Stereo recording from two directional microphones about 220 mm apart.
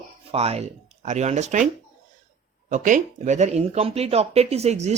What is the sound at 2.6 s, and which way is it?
Speech, 35° right (ahead or behind).